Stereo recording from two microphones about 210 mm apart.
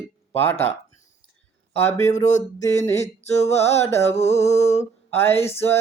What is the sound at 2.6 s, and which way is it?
Mantra, 15° left (ahead or behind).